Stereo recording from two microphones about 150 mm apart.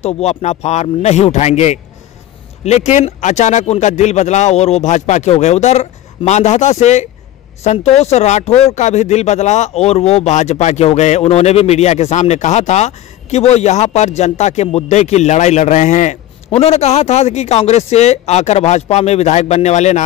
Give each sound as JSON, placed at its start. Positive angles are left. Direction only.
{"t": 0.0, "sound": "speech", "side_deg": 45}